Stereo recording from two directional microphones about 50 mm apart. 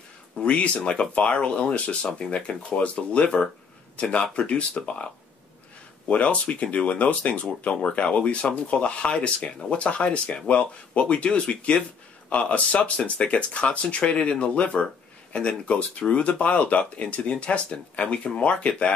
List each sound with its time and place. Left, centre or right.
0.4 s speech: left